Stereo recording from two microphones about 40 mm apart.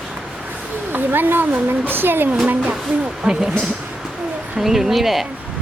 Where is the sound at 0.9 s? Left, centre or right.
Right.